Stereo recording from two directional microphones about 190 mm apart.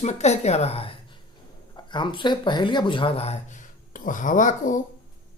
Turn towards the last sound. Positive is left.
turn(degrees=45)  # may be behind; listen again after turning